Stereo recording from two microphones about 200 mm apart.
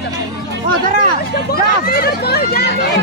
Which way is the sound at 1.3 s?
50° left (ahead or behind).